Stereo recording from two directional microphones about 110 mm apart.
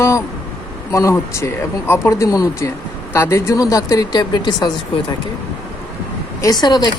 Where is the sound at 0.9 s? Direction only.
30° left (ahead or behind).